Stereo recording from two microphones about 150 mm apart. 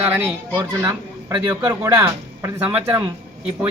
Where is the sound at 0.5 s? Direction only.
25° right (ahead or behind).